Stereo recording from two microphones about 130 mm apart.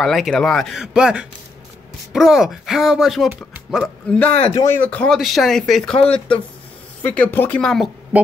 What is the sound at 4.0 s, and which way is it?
Speech, 10° left (ahead or behind).